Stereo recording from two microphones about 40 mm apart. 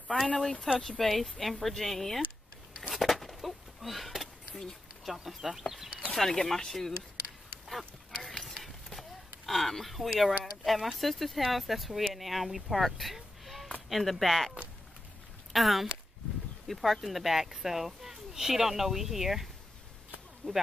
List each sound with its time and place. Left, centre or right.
0.7 s speech: centre
2.9 s a sound: centre
5.0 s speech: centre
6.1 s speech: centre
7.6 s a sound: centre
9.5 s speech: centre
15.5 s speech: centre
20.4 s speech: left